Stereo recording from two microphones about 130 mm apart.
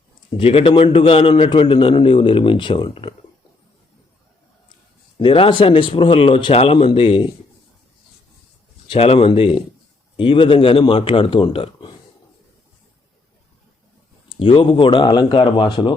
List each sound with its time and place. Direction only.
0.3 s a man's voice: 45° left (ahead or behind)
5.2 s a man's voice: 40° left (ahead or behind)
8.9 s a man's voice: 45° left (ahead or behind)
14.3 s speech: 45° left (ahead or behind)